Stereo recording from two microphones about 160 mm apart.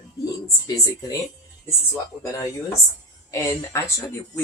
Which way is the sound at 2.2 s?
20° left (ahead or behind).